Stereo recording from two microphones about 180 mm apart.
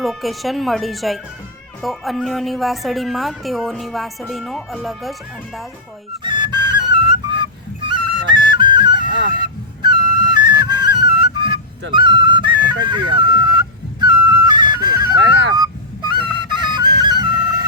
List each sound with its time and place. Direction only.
0.0 s speech: centre (ahead or behind)
6.2 s music: 25° right (ahead or behind)
11.9 s flute: 25° right (ahead or behind)
14.0 s music: 25° right (ahead or behind)
16.6 s flute: 25° right (ahead or behind)